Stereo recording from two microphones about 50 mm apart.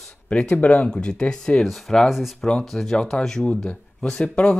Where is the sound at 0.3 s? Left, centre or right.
Left.